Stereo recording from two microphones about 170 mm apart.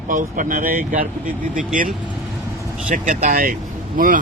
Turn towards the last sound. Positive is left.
turn(degrees=-50)  # may be behind; listen again after turning